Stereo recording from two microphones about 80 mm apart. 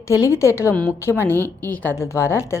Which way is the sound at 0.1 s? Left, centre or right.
Left.